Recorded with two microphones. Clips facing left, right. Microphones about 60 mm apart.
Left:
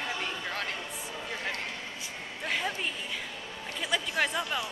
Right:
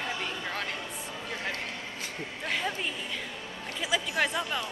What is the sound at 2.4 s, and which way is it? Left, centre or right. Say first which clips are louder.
Speech: even; centre.